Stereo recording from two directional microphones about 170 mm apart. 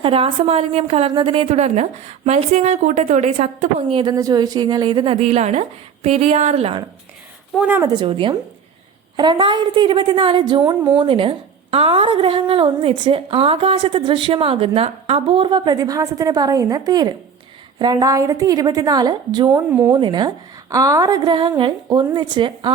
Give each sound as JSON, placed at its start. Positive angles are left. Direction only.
{"t": 0.0, "sound": "a woman's voice", "side_deg": -30}
{"t": 3.9, "sound": "a woman's voice", "side_deg": -25}
{"t": 7.6, "sound": "speech", "side_deg": -10}
{"t": 7.9, "sound": "a woman's voice", "side_deg": -30}
{"t": 19.5, "sound": "speech", "side_deg": -10}
{"t": 19.9, "sound": "a woman's voice", "side_deg": -25}